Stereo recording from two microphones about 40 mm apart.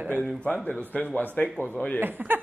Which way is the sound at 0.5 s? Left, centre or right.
Left.